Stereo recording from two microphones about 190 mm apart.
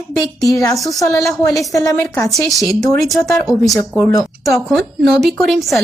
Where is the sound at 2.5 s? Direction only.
Centre (ahead or behind).